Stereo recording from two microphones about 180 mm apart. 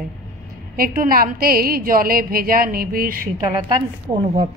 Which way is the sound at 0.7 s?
55° right (ahead or behind).